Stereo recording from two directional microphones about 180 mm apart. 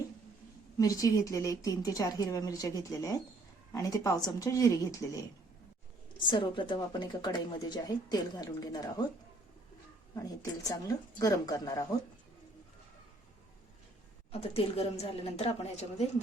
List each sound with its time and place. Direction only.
0.8 s a woman's voice: 20° left (ahead or behind)
10.2 s a woman's voice: 20° left (ahead or behind)
14.5 s a woman's voice: 35° left (ahead or behind)